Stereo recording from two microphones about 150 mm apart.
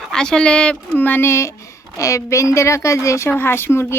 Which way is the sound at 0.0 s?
5° left (ahead or behind).